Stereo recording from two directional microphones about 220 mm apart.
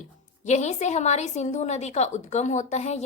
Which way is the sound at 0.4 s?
30° left (ahead or behind).